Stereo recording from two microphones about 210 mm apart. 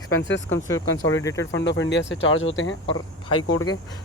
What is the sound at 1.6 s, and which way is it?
Speech, 60° left (ahead or behind).